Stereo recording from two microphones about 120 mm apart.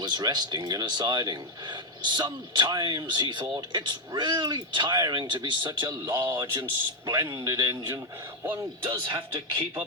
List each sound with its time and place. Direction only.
0.0 s a man's voice: 35° right (ahead or behind)
8.9 s speech: 40° right (ahead or behind)